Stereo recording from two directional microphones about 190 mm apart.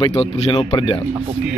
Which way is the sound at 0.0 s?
30° left (ahead or behind).